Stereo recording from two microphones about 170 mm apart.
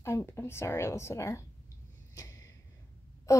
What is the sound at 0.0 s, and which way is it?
Speech, 15° left (ahead or behind).